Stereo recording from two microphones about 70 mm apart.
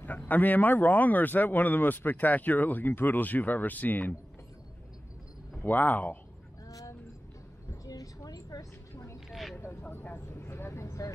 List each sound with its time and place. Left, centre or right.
0.0 s speech: left
5.6 s speech: left
6.7 s vehicle: left
7.8 s a sound: left
8.9 s a sound: left
9.3 s vehicle: centre
9.6 s vehicle: left